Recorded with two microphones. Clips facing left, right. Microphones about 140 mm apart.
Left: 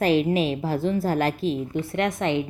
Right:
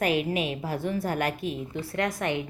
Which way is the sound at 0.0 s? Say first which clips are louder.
Left 5 dB; 30° left (ahead or behind).